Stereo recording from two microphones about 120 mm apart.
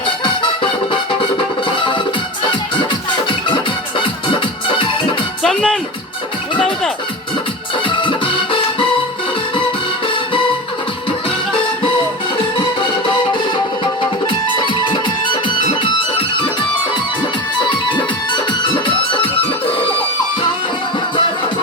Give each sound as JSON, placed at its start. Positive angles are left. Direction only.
{"t": 3.2, "sound": "music", "side_deg": 45}
{"t": 5.4, "sound": "music", "side_deg": 5}
{"t": 7.9, "sound": "music", "side_deg": 45}
{"t": 12.5, "sound": "music", "side_deg": 40}
{"t": 14.3, "sound": "music", "side_deg": 40}
{"t": 17.7, "sound": "music", "side_deg": 40}